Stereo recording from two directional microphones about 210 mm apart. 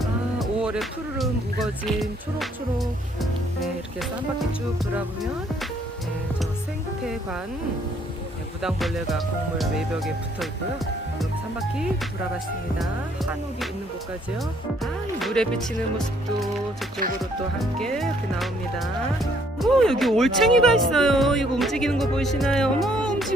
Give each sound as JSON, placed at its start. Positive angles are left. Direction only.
{"t": 0.0, "sound": "music", "side_deg": 0}
{"t": 8.6, "sound": "speech", "side_deg": 0}
{"t": 15.2, "sound": "speech", "side_deg": 0}
{"t": 17.0, "sound": "speech", "side_deg": -45}
{"t": 17.6, "sound": "speech", "side_deg": 5}